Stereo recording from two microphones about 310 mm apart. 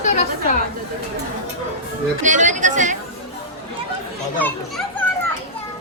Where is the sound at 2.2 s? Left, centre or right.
Right.